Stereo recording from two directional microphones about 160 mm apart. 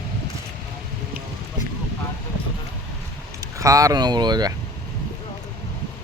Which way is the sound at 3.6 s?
20° right (ahead or behind).